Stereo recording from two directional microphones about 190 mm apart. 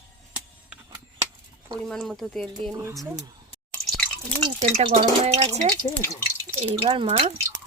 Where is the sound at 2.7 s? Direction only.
15° right (ahead or behind).